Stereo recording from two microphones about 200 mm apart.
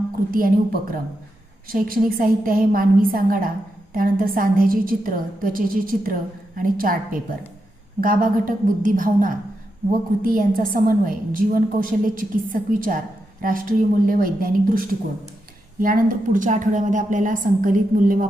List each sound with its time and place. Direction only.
0.3 s a woman's voice: 45° right (ahead or behind)